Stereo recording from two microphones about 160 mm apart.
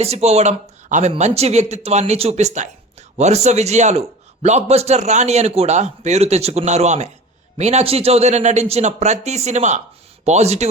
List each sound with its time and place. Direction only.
0.0 s a man's voice: 40° right (ahead or behind)